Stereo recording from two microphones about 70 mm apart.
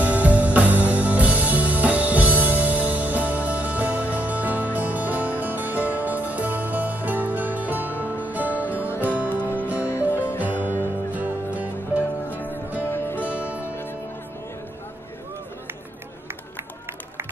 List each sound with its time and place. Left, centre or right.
0.0 s music: right
8.9 s music: left
10.4 s music: right
12.8 s music: left